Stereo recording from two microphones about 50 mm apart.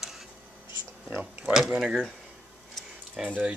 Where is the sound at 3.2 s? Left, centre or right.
Right.